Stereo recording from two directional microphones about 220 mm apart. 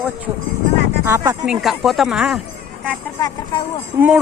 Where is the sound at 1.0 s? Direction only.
15° right (ahead or behind).